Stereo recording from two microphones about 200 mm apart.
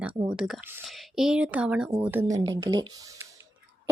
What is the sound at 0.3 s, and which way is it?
Speech, centre (ahead or behind).